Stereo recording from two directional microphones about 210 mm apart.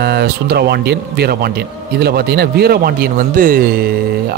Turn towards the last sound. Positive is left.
turn(degrees=-45)  # may be behind; listen again after turning